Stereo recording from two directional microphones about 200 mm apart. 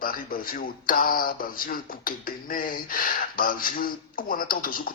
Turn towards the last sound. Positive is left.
turn(degrees=45)  # may be behind; listen again after turning